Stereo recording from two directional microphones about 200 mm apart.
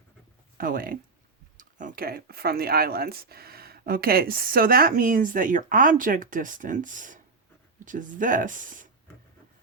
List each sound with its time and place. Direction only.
0.5 s speech: 45° right (ahead or behind)